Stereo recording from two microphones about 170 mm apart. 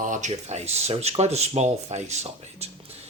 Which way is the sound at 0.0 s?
45° right (ahead or behind).